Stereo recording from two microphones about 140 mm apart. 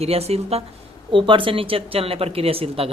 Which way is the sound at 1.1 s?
35° right (ahead or behind).